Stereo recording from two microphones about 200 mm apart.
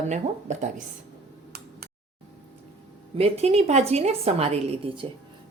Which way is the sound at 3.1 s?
30° right (ahead or behind).